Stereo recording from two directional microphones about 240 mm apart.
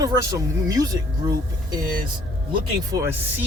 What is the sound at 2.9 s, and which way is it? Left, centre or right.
Speech, centre.